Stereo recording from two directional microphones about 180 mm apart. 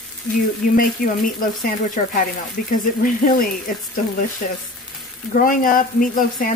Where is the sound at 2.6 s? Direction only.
50° left (ahead or behind).